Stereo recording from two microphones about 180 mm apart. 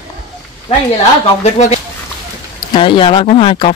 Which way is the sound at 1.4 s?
40° left (ahead or behind).